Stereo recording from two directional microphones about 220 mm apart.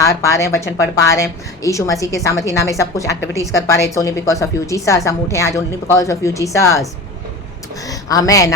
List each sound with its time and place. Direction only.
0.0 s a woman's voice: 15° left (ahead or behind)
7.9 s a woman's voice: 15° left (ahead or behind)